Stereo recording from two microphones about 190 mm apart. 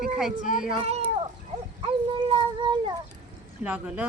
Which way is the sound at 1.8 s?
25° right (ahead or behind).